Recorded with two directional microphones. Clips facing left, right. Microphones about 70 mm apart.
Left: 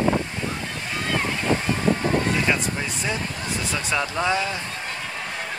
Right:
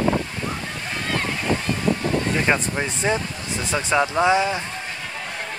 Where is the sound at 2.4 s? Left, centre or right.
Right.